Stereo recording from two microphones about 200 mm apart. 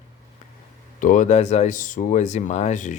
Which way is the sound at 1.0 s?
40° left (ahead or behind).